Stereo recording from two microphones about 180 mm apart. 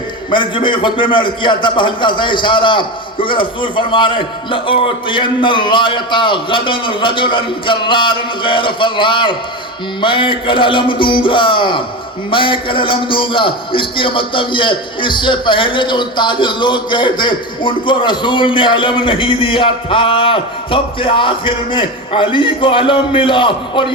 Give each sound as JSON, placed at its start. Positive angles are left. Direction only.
{"t": 0.3, "sound": "a man's voice", "side_deg": 25}